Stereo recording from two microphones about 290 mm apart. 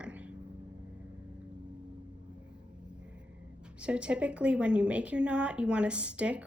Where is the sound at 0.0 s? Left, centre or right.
Centre.